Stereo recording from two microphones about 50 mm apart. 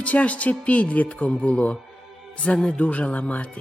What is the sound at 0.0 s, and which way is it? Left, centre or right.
Speech, left.